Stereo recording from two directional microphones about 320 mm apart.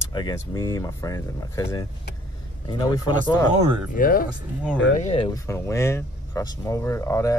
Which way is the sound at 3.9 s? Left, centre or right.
Left.